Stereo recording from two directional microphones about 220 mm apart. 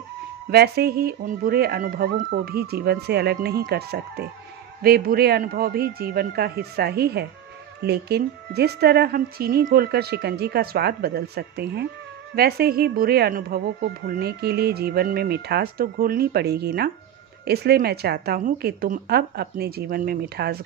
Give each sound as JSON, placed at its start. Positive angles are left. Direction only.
{"t": 0.5, "sound": "speech", "side_deg": -45}